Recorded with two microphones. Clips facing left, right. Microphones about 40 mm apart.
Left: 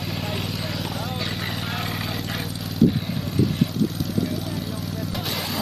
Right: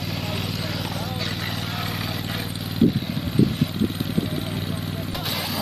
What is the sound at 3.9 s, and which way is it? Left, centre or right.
Vehicle, right.